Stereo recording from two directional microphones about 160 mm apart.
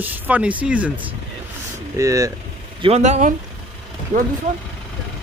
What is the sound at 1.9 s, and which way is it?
Speech, 20° right (ahead or behind).